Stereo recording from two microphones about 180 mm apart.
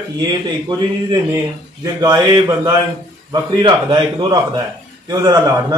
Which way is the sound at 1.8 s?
20° right (ahead or behind).